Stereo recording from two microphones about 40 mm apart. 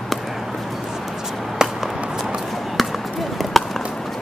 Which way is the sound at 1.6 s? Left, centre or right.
Centre.